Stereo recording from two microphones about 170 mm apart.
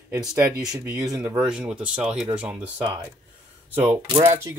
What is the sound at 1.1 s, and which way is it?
Speech, 20° right (ahead or behind).